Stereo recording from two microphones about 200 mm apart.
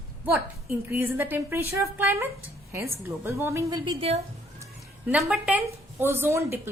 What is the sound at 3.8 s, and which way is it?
Speech, 30° right (ahead or behind).